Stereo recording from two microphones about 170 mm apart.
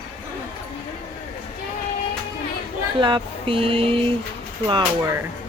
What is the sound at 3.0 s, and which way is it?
Speech, 30° right (ahead or behind).